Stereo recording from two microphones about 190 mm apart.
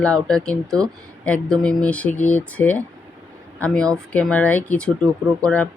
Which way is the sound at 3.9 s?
5° left (ahead or behind).